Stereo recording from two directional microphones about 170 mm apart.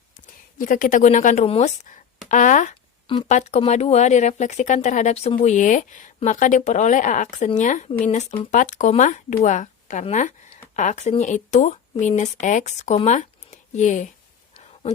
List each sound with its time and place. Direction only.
0.6 s speech: 50° left (ahead or behind)